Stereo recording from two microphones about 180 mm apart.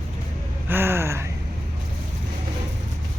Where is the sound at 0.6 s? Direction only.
10° right (ahead or behind).